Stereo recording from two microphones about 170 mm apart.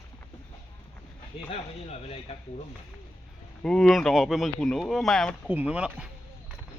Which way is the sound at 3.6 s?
5° left (ahead or behind).